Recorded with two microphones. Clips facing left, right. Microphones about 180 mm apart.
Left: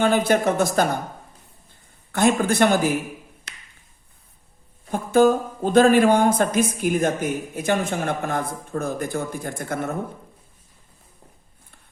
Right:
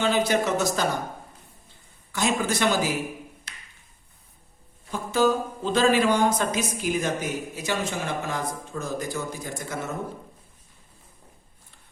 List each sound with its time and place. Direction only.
0.0 s speech: 50° left (ahead or behind)
2.1 s speech: 55° left (ahead or behind)
3.5 s a sound: 70° left (ahead or behind)
4.9 s speech: 55° left (ahead or behind)